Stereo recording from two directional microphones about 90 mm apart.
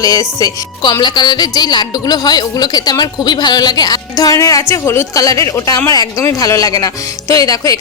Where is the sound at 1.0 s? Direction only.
55° left (ahead or behind).